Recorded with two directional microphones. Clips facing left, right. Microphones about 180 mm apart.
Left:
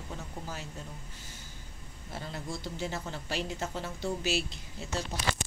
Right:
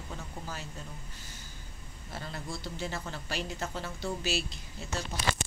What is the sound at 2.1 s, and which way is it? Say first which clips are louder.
A woman's voice: left 1 dB; 20° left (ahead or behind).